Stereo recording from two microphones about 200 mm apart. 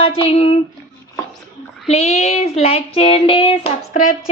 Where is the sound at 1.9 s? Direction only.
35° left (ahead or behind).